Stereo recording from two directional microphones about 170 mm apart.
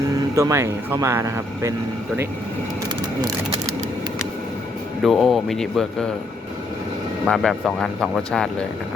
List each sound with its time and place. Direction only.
0.3 s speech: 15° right (ahead or behind)
5.0 s speech: centre (ahead or behind)
7.3 s speech: centre (ahead or behind)